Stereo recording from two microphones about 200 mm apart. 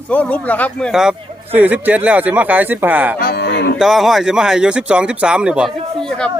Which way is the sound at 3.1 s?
50° left (ahead or behind).